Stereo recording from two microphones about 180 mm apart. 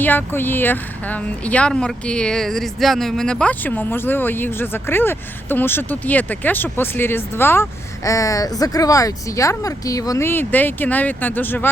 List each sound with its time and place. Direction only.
0.0 s speech: 10° left (ahead or behind)